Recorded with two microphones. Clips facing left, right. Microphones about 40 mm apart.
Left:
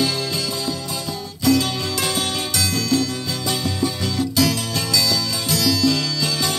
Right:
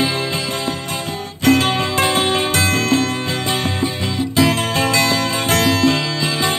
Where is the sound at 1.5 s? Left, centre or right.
Right.